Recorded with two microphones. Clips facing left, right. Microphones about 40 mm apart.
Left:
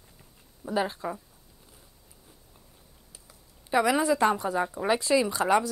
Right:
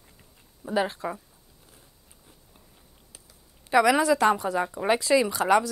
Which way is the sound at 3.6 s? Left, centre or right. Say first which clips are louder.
Right 3 dB; right.